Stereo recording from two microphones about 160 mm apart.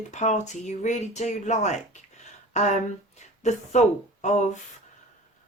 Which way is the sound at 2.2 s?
45° left (ahead or behind).